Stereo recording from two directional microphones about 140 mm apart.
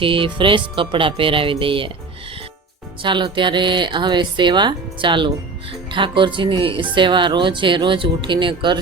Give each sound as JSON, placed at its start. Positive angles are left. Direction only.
{"t": 0.0, "sound": "speech", "side_deg": -40}
{"t": 3.0, "sound": "speech", "side_deg": -35}